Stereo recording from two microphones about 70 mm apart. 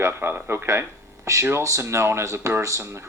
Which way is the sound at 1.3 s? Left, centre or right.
Right.